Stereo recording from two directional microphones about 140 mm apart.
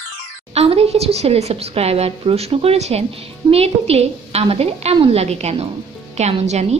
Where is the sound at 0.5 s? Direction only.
45° right (ahead or behind).